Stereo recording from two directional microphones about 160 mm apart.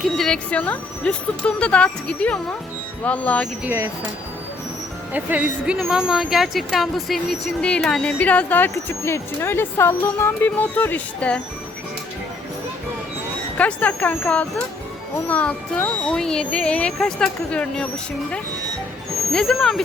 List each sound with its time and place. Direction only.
0.2 s speech: 5° left (ahead or behind)
3.6 s speech: 15° right (ahead or behind)
5.1 s speech: 10° right (ahead or behind); by 11.3 s 10° left (ahead or behind)
13.6 s speech: 10° left (ahead or behind)
19.3 s speech: 5° left (ahead or behind)